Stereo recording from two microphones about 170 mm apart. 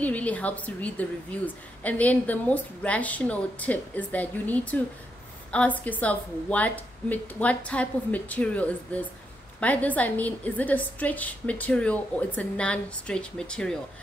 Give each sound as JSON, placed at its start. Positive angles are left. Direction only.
{"t": 0.0, "sound": "a woman's voice", "side_deg": 10}